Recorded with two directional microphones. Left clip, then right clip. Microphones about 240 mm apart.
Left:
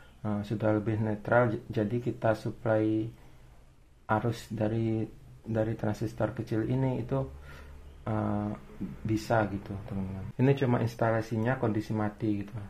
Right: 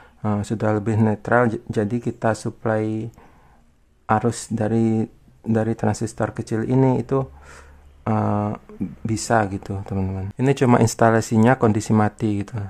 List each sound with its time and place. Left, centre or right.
0.2 s speech: right
4.0 s speech: right